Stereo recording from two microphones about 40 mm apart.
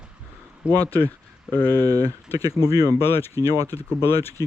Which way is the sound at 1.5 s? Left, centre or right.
Left.